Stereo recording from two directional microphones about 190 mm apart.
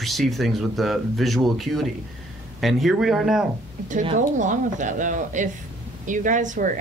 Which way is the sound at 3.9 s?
35° right (ahead or behind).